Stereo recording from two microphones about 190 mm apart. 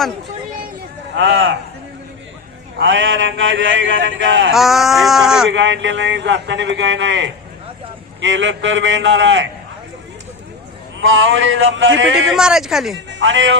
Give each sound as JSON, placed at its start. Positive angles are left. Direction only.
{"t": 1.1, "sound": "a man's voice", "side_deg": -75}
{"t": 2.7, "sound": "a man's voice", "side_deg": -85}
{"t": 4.5, "sound": "speech", "side_deg": 0}
{"t": 5.5, "sound": "a man's voice", "side_deg": -75}
{"t": 11.0, "sound": "a man's voice", "side_deg": -90}
{"t": 12.4, "sound": "speech", "side_deg": -5}
{"t": 13.1, "sound": "a man's voice", "side_deg": -70}